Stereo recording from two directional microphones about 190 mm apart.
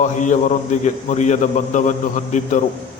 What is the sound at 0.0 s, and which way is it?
A man's voice, 40° left (ahead or behind).